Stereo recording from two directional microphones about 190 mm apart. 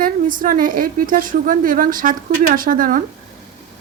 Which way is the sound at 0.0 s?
45° right (ahead or behind).